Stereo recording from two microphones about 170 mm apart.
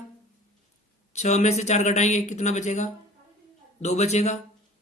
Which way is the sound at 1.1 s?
40° left (ahead or behind).